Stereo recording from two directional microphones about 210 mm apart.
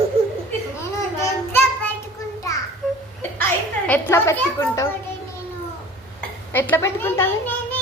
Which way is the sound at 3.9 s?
10° left (ahead or behind).